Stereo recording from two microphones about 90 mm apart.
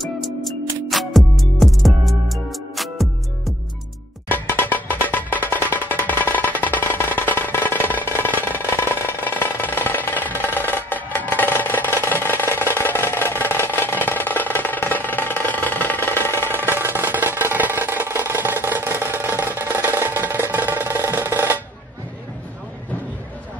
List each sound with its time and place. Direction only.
0.0 s music: centre (ahead or behind)
4.3 s music: 20° left (ahead or behind)
8.5 s a sound: 25° left (ahead or behind)
16.4 s music: 25° right (ahead or behind)